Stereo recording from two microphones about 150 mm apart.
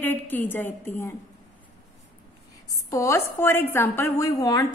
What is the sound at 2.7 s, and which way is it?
A woman's voice, 20° left (ahead or behind).